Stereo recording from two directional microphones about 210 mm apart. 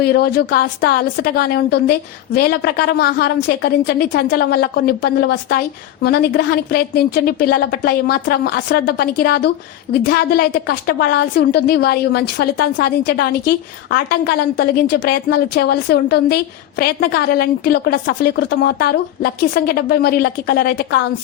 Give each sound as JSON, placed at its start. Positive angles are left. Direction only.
{"t": 0.0, "sound": "a woman's voice", "side_deg": 50}